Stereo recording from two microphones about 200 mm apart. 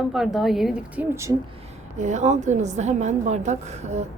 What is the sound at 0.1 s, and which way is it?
Speech, centre (ahead or behind).